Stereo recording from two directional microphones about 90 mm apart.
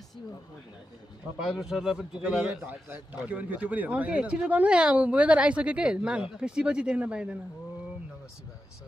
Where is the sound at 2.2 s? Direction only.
20° right (ahead or behind).